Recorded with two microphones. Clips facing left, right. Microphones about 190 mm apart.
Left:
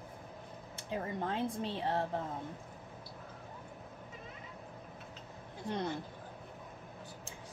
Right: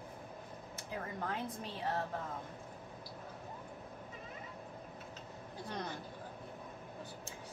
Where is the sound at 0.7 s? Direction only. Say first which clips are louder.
Left 5 dB; 25° left (ahead or behind).